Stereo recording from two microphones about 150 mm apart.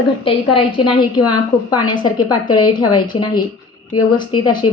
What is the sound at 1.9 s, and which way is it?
A woman's voice, 30° left (ahead or behind).